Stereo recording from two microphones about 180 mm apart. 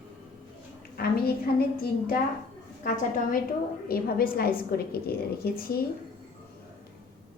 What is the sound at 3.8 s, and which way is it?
A woman's voice, 55° left (ahead or behind).